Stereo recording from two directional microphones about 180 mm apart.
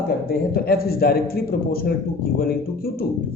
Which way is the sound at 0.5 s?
60° left (ahead or behind).